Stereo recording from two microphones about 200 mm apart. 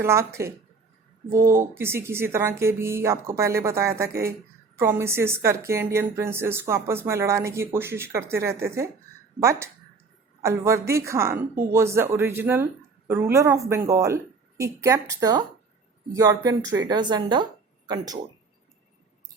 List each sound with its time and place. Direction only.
0.0 s a woman's voice: 15° right (ahead or behind)